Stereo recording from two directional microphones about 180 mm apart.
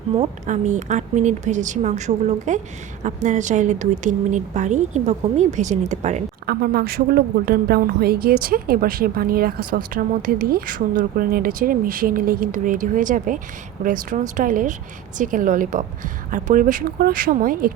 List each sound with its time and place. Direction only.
0.2 s a woman's voice: 40° right (ahead or behind)
6.4 s speech: 60° right (ahead or behind)